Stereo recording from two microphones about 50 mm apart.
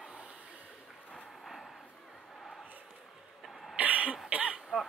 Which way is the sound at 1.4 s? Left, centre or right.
Centre.